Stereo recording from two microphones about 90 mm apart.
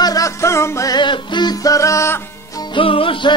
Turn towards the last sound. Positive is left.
turn(degrees=70)  # may be behind; listen again after turning